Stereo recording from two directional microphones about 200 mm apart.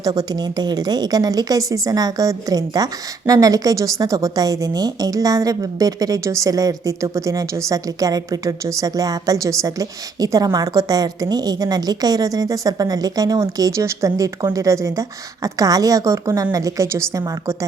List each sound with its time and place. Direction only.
0.0 s a woman's voice: 20° right (ahead or behind)